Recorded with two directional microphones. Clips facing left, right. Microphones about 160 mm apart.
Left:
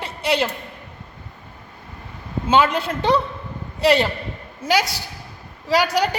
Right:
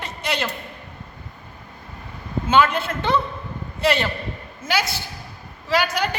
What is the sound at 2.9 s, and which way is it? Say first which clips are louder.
A woman's voice: left 3 dB; 35° left (ahead or behind).